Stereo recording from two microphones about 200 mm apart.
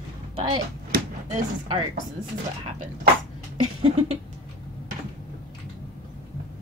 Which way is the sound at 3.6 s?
90° right.